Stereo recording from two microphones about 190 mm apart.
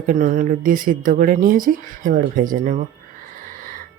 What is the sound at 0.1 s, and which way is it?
Speech, 40° right (ahead or behind).